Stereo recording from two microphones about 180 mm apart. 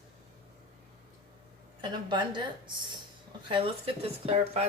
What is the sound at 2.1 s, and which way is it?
A woman's voice, 25° right (ahead or behind).